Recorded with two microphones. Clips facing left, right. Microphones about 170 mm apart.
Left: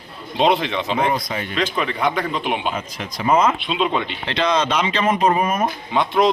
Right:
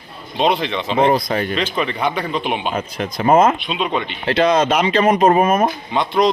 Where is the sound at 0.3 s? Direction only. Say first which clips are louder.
Even; 10° left (ahead or behind).